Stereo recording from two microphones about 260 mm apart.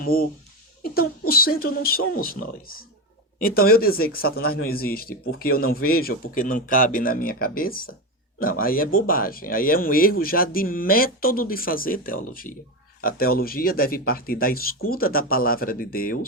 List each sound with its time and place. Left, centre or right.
0.0 s speech: left
1.3 s speech: left